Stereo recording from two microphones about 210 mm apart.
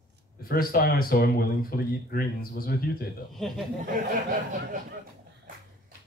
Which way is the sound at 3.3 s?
Centre (ahead or behind).